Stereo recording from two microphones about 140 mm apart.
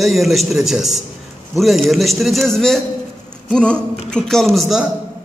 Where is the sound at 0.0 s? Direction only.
Centre (ahead or behind).